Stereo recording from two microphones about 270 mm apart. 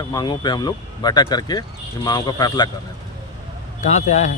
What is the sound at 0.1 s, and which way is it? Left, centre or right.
Speech, centre.